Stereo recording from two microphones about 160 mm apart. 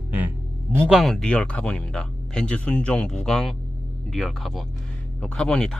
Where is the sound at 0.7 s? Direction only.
5° right (ahead or behind).